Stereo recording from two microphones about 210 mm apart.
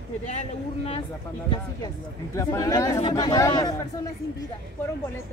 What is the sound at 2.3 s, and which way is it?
Speech, 15° left (ahead or behind).